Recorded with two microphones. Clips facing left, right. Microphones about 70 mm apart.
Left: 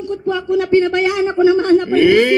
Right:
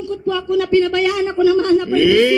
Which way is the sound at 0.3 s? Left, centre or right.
Left.